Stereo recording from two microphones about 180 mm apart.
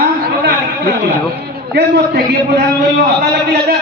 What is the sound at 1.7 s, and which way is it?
A man's voice, 60° right (ahead or behind).